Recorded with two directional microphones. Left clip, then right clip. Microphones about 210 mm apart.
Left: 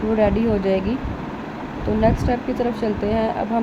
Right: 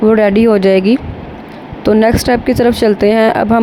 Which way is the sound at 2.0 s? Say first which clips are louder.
Right 9 dB; 50° right (ahead or behind).